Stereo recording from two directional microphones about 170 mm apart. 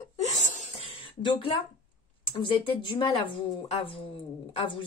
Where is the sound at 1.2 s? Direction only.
30° left (ahead or behind).